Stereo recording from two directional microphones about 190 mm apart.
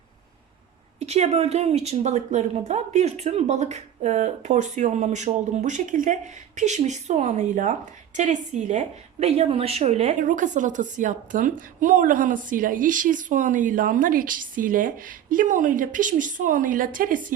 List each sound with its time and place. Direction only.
0.9 s a woman's voice: 35° right (ahead or behind)